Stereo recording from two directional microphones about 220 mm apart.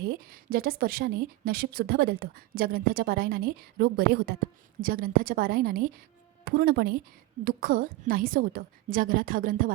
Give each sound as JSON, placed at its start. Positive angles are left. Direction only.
{"t": 0.0, "sound": "a woman's voice", "side_deg": -40}